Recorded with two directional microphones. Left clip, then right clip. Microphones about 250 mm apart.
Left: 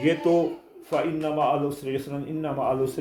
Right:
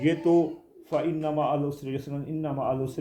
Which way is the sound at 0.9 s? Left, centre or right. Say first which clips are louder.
Left 2 dB; centre.